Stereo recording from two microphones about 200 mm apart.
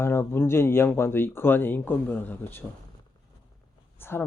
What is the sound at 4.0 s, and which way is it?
Speech, 10° left (ahead or behind).